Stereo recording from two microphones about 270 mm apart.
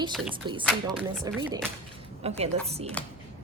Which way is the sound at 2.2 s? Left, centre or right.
Right.